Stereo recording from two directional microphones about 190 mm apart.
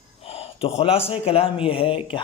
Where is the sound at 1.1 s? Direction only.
30° left (ahead or behind).